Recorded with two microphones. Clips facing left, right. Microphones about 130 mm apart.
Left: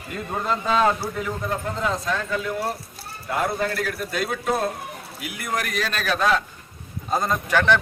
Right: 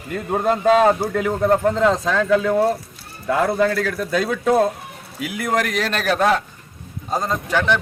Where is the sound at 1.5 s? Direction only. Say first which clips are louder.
Right 11 dB; 65° right (ahead or behind); by 2.6 s 90° right.